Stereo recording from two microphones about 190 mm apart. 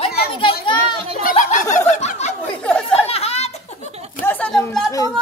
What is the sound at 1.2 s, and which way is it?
Speech, 45° left (ahead or behind).